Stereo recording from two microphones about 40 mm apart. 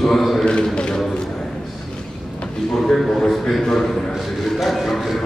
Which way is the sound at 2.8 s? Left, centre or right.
Centre.